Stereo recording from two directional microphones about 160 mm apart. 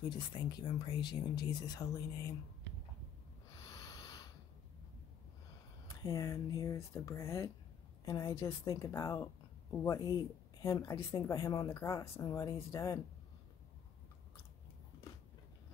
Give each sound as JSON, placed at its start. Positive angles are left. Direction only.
{"t": 0.1, "sound": "speech", "side_deg": 25}
{"t": 3.6, "sound": "a sound", "side_deg": 20}
{"t": 6.0, "sound": "a woman's voice", "side_deg": 20}